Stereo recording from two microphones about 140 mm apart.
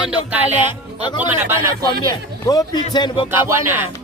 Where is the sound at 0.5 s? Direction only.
35° left (ahead or behind).